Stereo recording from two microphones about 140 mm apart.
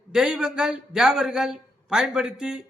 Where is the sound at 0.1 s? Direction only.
5° right (ahead or behind).